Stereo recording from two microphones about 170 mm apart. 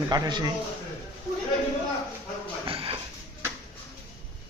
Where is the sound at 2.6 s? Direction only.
35° right (ahead or behind).